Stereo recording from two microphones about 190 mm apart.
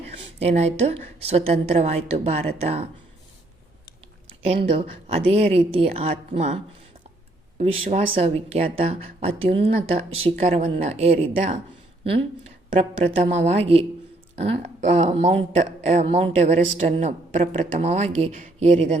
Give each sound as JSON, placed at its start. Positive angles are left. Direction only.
{"t": 0.2, "sound": "speech", "side_deg": -35}
{"t": 4.4, "sound": "speech", "side_deg": -35}
{"t": 7.6, "sound": "speech", "side_deg": -35}
{"t": 12.8, "sound": "speech", "side_deg": -35}